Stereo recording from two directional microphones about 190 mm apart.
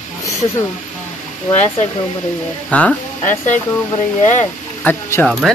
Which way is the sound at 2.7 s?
5° left (ahead or behind).